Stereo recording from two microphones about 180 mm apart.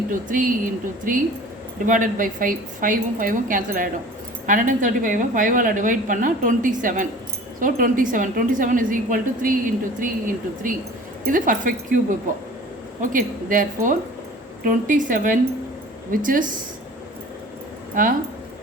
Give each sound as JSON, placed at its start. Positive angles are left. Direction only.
{"t": 0.1, "sound": "a woman's voice", "side_deg": -50}
{"t": 17.9, "sound": "speech", "side_deg": -50}